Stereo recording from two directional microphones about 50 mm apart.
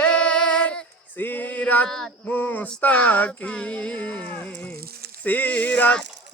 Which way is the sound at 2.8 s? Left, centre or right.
Left.